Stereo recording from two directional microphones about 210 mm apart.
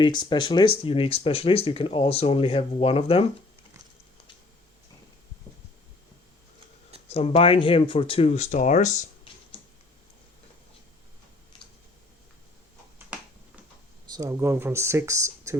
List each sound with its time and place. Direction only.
0.0 s speech: 20° left (ahead or behind)
7.1 s speech: 30° left (ahead or behind)
14.1 s speech: 15° right (ahead or behind)